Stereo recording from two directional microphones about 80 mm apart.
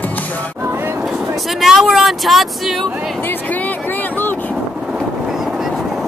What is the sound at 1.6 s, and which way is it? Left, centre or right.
Speech, centre.